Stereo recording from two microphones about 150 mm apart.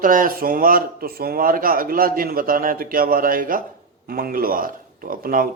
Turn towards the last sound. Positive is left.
turn(degrees=-70)  # may be behind; listen again after turning